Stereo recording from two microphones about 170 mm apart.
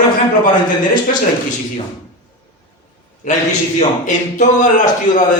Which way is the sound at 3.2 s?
50° left (ahead or behind).